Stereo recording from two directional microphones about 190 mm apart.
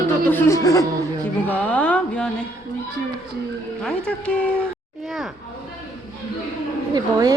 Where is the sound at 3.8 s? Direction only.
5° left (ahead or behind).